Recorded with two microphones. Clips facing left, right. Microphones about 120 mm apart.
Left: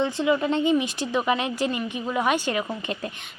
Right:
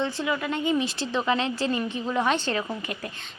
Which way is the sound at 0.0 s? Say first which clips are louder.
Left 5 dB; 20° left (ahead or behind).